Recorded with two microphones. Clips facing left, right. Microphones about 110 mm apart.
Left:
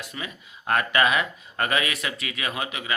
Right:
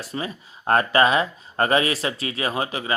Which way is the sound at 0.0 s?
35° right (ahead or behind).